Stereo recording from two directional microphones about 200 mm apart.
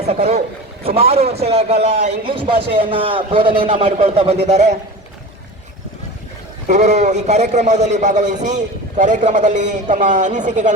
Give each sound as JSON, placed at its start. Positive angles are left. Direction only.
{"t": 0.1, "sound": "a man's voice", "side_deg": -30}
{"t": 6.7, "sound": "a man's voice", "side_deg": -35}